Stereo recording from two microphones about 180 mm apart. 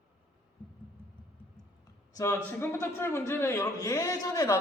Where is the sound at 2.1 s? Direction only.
15° left (ahead or behind).